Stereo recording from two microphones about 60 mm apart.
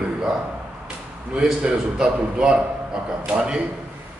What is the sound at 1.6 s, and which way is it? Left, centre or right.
A man's voice, centre.